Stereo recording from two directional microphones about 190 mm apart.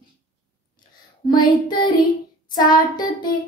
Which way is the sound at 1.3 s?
25° left (ahead or behind).